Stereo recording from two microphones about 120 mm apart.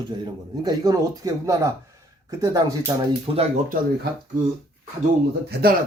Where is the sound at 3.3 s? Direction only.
50° right (ahead or behind).